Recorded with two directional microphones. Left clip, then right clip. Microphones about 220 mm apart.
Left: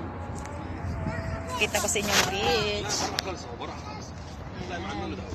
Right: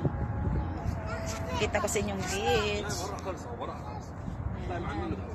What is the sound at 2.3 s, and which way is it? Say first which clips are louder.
Speech: left 2 dB; 15° left (ahead or behind).